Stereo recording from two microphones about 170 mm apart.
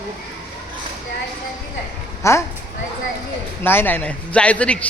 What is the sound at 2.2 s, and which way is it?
Speech, 15° left (ahead or behind).